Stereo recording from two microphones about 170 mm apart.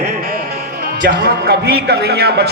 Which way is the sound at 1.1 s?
65° right (ahead or behind).